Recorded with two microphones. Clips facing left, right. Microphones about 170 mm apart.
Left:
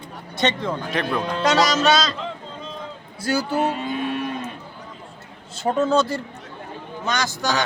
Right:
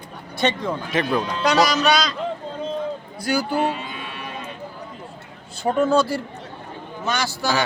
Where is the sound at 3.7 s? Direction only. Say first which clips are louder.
Left 4 dB; 45° left (ahead or behind).